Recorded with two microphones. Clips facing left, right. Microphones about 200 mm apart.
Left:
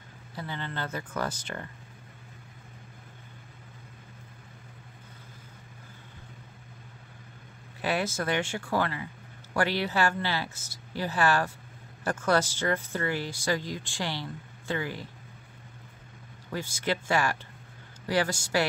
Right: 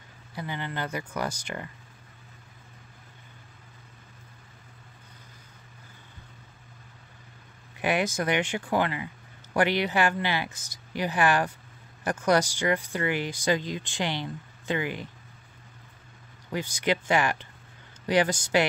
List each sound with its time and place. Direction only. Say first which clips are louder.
0.4 s speech: right 2 dB; 15° right (ahead or behind)
7.8 s speech: right 3 dB; 15° right (ahead or behind)
16.5 s speech: right 3 dB; 15° right (ahead or behind)